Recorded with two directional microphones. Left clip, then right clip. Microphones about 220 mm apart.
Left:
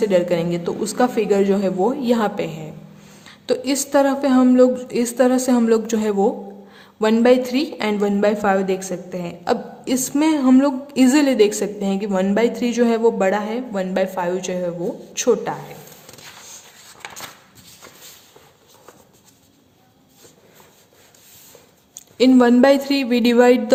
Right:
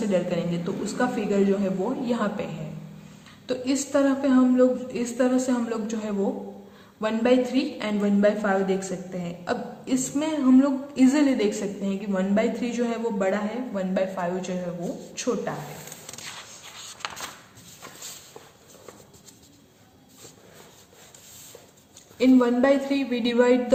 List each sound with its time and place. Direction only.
0.1 s a woman's voice: 50° left (ahead or behind)
22.2 s a woman's voice: 50° left (ahead or behind)